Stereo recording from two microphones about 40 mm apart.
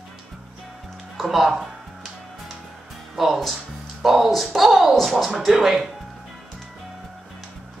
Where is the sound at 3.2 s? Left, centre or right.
Centre.